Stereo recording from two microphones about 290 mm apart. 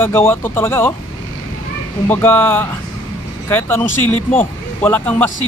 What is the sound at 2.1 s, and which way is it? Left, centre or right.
Speech, centre.